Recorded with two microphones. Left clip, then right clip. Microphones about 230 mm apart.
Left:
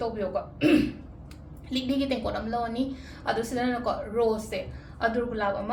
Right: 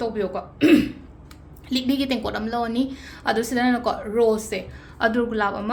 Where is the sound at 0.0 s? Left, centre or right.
Right.